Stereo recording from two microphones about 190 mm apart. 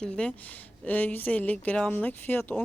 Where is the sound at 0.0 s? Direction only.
5° left (ahead or behind).